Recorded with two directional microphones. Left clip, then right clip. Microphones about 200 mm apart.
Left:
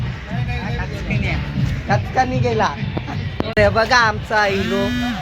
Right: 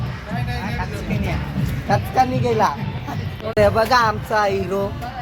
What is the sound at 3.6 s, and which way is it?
Speech, 5° right (ahead or behind).